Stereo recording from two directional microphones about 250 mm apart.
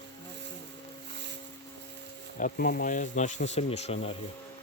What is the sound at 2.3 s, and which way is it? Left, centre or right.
Speech, left.